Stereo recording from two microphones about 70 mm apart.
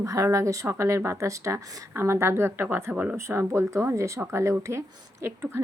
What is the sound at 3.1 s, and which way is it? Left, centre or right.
A woman's voice, right.